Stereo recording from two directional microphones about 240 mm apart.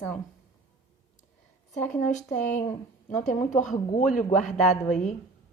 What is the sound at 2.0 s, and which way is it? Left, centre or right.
Speech, left.